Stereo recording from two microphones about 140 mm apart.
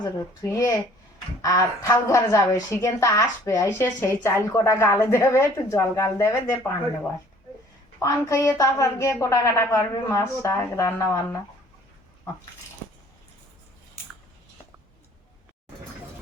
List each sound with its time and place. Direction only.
0.5 s a woman's voice: 25° left (ahead or behind)